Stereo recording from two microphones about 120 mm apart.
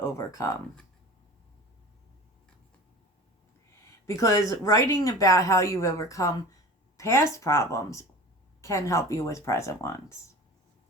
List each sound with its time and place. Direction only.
0.3 s speech: 30° left (ahead or behind)
4.0 s speech: 30° left (ahead or behind)